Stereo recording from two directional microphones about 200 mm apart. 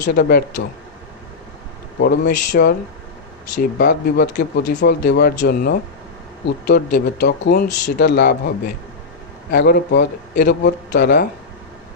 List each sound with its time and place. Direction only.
0.1 s speech: 50° left (ahead or behind)
2.0 s speech: 50° left (ahead or behind)